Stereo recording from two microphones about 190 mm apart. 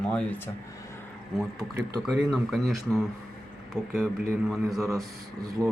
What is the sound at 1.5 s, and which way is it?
Speech, 20° right (ahead or behind).